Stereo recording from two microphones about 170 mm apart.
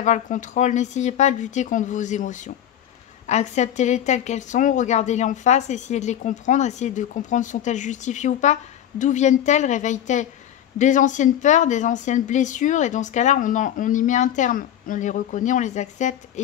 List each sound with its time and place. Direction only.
0.0 s speech: 45° left (ahead or behind)